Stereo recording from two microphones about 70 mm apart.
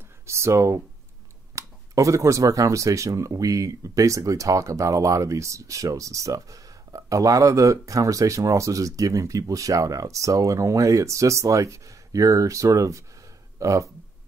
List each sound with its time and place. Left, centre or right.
0.3 s speech: right